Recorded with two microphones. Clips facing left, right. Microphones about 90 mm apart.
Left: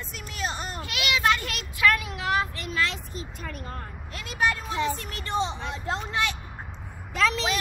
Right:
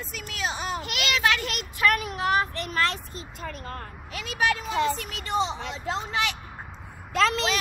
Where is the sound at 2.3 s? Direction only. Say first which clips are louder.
Left 2 dB; 55° right (ahead or behind).